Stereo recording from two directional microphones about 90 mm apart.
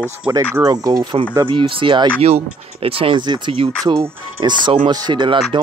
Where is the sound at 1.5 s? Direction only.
75° right (ahead or behind).